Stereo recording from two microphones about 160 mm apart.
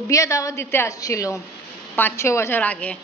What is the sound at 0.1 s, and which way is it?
A woman's voice, 20° left (ahead or behind).